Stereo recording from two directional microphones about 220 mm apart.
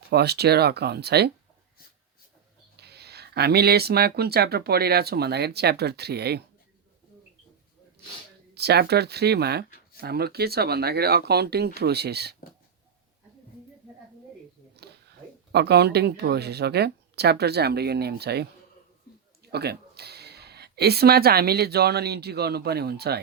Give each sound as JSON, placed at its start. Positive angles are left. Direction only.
{"t": 0.1, "sound": "speech", "side_deg": -45}
{"t": 2.8, "sound": "speech", "side_deg": -45}
{"t": 8.5, "sound": "speech", "side_deg": -45}
{"t": 14.8, "sound": "a sound", "side_deg": -50}
{"t": 15.5, "sound": "speech", "side_deg": -50}